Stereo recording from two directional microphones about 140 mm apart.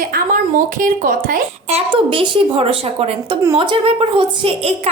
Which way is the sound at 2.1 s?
35° right (ahead or behind).